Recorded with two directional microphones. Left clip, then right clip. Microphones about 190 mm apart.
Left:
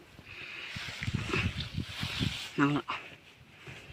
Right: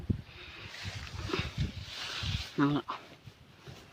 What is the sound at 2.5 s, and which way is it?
Speech, centre (ahead or behind).